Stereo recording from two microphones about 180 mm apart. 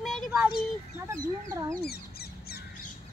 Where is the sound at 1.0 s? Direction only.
15° right (ahead or behind).